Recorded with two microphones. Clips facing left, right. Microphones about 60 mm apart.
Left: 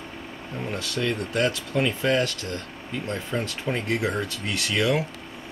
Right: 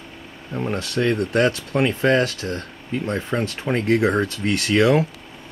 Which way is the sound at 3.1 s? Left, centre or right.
Right.